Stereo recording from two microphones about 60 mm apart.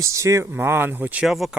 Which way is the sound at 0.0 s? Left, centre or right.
Right.